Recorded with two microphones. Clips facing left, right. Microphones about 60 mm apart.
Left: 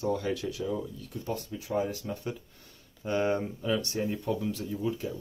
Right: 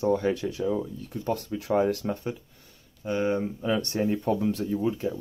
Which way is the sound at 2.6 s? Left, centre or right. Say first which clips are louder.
Right 1 dB; centre.